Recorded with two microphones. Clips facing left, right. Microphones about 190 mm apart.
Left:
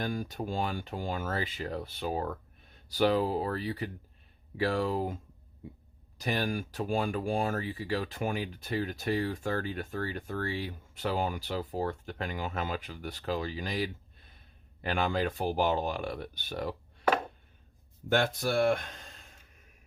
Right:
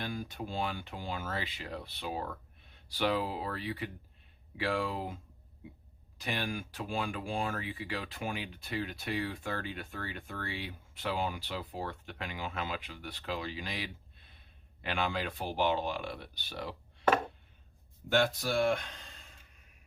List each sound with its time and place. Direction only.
0.0 s speech: 45° left (ahead or behind)
18.1 s speech: 50° left (ahead or behind)